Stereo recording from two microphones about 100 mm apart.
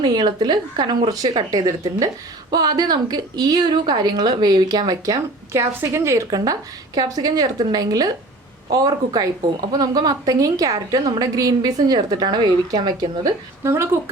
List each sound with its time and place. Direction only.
0.0 s a woman's voice: 45° right (ahead or behind)
13.7 s speech: 25° right (ahead or behind)